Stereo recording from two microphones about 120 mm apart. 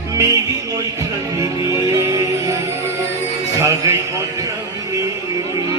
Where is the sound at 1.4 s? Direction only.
25° right (ahead or behind).